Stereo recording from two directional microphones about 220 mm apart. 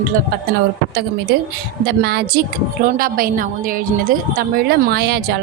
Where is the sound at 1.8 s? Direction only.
45° right (ahead or behind).